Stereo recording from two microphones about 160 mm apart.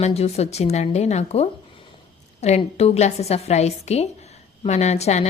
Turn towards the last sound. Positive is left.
turn(degrees=45)  # may be behind; listen again after turning